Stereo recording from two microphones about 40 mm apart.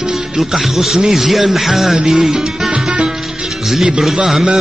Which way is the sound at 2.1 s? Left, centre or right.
Centre.